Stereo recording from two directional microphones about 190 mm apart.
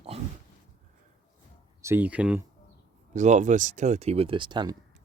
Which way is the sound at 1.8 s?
10° right (ahead or behind).